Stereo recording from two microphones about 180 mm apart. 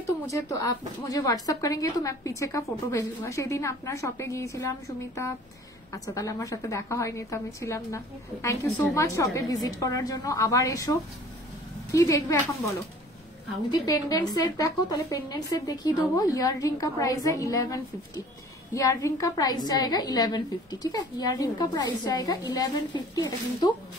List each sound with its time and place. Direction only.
0.0 s a woman's voice: 15° left (ahead or behind)
13.7 s a woman's voice: 20° left (ahead or behind)